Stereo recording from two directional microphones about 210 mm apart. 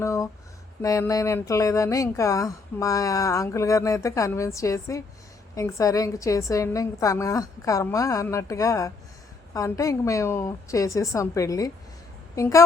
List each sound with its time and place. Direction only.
0.0 s speech: 15° left (ahead or behind)